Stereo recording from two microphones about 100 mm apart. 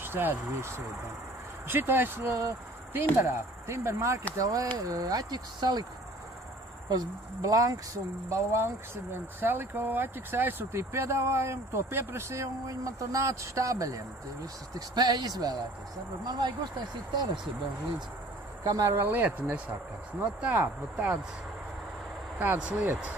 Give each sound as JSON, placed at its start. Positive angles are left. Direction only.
{"t": 0.0, "sound": "speech", "side_deg": -20}
{"t": 6.9, "sound": "speech", "side_deg": -40}
{"t": 18.6, "sound": "speech", "side_deg": -35}
{"t": 22.4, "sound": "speech", "side_deg": -15}